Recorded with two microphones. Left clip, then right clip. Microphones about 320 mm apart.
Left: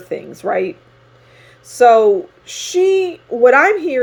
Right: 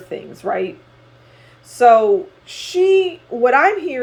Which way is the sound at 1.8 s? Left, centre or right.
Left.